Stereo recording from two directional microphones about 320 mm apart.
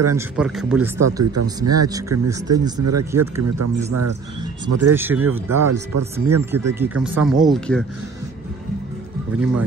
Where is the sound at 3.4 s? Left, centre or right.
Right.